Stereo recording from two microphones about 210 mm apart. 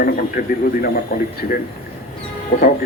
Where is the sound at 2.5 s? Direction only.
45° left (ahead or behind).